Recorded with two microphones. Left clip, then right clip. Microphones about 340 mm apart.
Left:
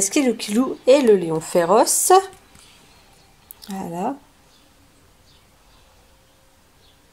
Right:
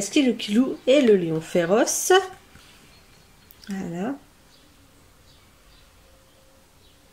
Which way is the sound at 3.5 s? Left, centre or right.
Centre.